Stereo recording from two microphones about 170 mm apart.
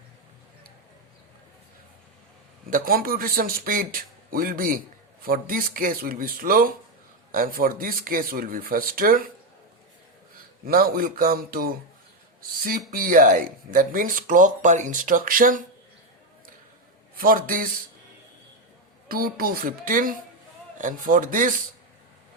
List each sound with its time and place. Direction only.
2.6 s speech: 55° right (ahead or behind)
10.7 s speech: 60° right (ahead or behind)
17.2 s speech: 55° right (ahead or behind)
19.0 s speech: 60° right (ahead or behind)